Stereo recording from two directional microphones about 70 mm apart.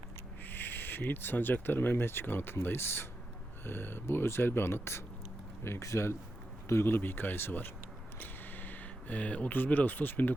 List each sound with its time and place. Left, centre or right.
0.4 s speech: left